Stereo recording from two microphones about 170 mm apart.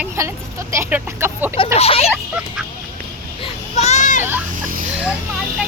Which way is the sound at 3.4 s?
35° left (ahead or behind).